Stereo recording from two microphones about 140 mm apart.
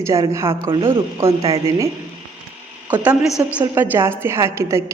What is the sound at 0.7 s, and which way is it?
Speech, 40° right (ahead or behind).